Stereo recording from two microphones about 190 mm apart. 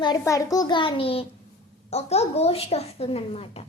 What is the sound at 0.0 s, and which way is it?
A child's voice, 20° left (ahead or behind).